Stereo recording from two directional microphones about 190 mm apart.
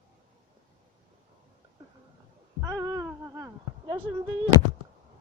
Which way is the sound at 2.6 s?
20° right (ahead or behind).